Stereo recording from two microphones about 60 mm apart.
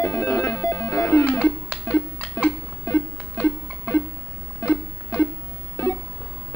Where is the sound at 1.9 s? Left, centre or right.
Left.